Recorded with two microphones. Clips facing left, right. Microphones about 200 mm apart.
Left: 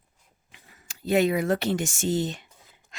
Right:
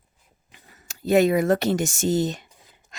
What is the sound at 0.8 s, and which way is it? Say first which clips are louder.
Speech: right 4 dB; 45° right (ahead or behind).